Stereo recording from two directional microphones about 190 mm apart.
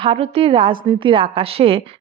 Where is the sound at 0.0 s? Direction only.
30° right (ahead or behind).